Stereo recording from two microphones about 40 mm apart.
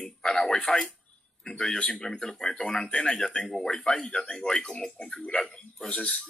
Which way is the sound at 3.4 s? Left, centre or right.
Centre.